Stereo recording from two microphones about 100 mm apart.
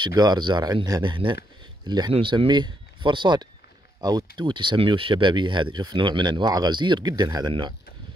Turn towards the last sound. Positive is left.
turn(degrees=-45)  # may be behind; listen again after turning